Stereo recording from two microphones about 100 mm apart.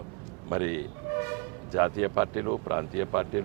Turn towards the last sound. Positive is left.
turn(degrees=-30)  # may be behind; listen again after turning